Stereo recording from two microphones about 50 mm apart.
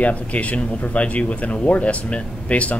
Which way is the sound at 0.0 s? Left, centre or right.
Left.